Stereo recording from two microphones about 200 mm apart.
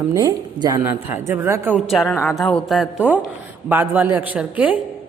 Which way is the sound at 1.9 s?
Centre (ahead or behind).